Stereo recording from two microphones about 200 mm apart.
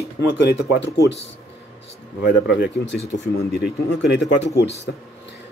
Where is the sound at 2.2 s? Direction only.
55° left (ahead or behind).